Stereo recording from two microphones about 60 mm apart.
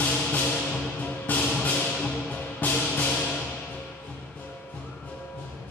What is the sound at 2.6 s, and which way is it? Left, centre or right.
Music, left.